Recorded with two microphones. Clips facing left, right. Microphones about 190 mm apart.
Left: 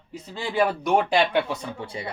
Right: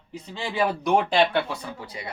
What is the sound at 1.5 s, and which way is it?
Speech, 30° left (ahead or behind).